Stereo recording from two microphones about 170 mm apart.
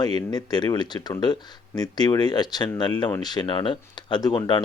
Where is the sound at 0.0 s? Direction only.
25° left (ahead or behind).